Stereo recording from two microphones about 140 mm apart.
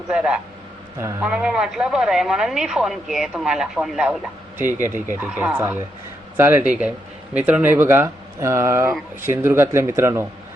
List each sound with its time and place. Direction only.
0.1 s a man's voice: 5° right (ahead or behind)